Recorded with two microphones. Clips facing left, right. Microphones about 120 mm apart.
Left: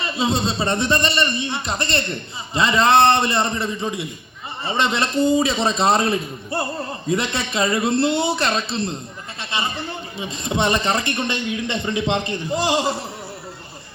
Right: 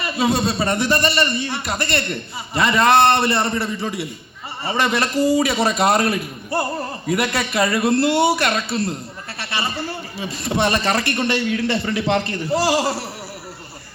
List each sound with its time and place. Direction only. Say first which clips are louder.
0.0 s a man's voice: right 2 dB; 25° left (ahead or behind)